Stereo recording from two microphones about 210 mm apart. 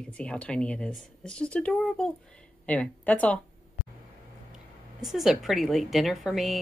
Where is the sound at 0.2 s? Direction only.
5° left (ahead or behind).